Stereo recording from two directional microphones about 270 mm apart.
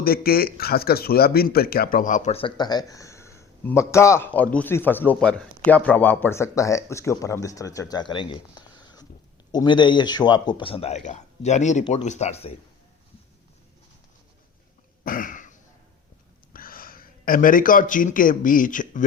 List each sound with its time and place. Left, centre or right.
0.0 s a man's voice: left
15.0 s throat clearing: left
16.5 s speech: left